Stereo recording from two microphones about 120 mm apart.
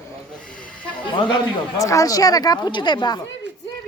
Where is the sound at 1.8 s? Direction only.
30° left (ahead or behind).